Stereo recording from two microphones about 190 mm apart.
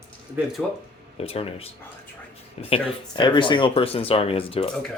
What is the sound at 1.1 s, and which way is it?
Speech, 30° left (ahead or behind).